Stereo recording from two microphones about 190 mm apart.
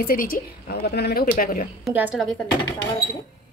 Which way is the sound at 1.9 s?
10° right (ahead or behind).